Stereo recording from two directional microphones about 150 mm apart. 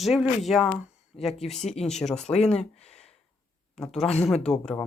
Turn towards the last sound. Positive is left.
turn(degrees=5)  # may be behind; listen again after turning